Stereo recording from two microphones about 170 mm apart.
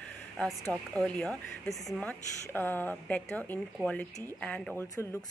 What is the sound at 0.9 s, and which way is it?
A woman's voice, 5° left (ahead or behind).